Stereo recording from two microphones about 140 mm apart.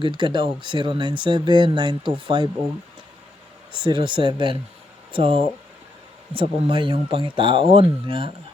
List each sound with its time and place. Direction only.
0.2 s speech: 35° right (ahead or behind)
3.7 s speech: 35° right (ahead or behind)